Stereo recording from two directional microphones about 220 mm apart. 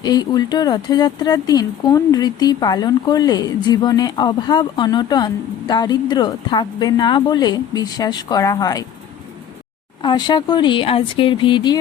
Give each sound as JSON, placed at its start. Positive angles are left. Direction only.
{"t": 0.0, "sound": "speech", "side_deg": 20}
{"t": 10.0, "sound": "speech", "side_deg": 20}